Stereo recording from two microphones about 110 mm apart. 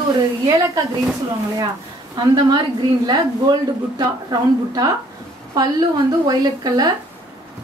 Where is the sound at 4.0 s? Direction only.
35° right (ahead or behind).